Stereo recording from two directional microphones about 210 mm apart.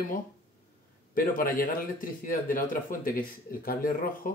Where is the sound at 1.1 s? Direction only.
40° left (ahead or behind).